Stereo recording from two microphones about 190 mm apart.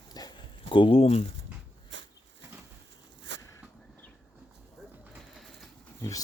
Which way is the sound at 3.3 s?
70° right (ahead or behind).